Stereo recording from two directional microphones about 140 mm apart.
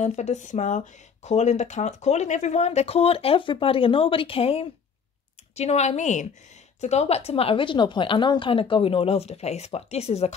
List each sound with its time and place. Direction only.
0.0 s speech: 55° left (ahead or behind)